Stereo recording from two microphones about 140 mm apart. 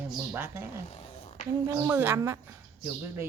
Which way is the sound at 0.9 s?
50° left (ahead or behind).